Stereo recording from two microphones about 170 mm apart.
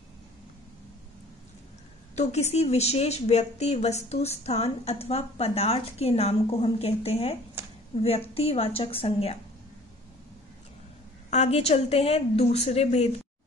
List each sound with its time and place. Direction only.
2.1 s a woman's voice: 40° left (ahead or behind)
11.2 s a woman's voice: 40° left (ahead or behind)